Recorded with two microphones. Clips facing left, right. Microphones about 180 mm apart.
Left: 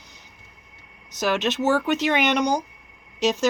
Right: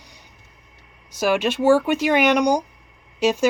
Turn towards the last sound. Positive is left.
turn(degrees=-10)  # may be behind; listen again after turning